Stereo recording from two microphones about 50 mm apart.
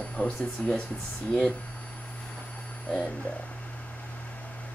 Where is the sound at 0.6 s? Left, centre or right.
Centre.